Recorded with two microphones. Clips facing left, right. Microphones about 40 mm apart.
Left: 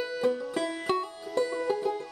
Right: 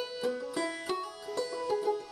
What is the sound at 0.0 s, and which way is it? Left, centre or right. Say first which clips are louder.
Music: left 5 dB; left.